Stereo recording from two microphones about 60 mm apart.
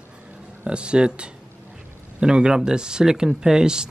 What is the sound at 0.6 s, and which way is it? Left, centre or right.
Speech, centre.